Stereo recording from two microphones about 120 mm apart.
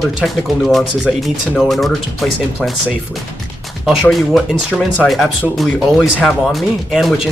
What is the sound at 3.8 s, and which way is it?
Speech, 5° right (ahead or behind).